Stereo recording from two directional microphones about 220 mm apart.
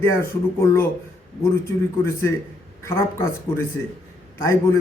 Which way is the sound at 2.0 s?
10° left (ahead or behind).